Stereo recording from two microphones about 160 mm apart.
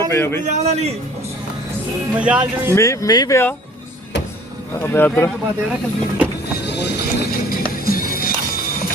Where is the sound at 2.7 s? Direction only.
20° left (ahead or behind).